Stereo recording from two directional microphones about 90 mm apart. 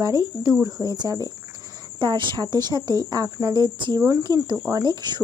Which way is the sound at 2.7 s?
50° right (ahead or behind).